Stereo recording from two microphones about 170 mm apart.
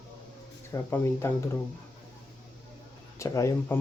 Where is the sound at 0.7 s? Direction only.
15° left (ahead or behind).